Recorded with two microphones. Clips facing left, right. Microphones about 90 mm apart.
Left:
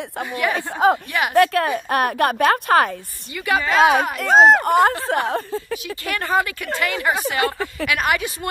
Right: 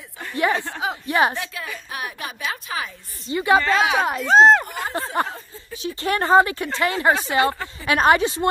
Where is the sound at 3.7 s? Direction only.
50° left (ahead or behind).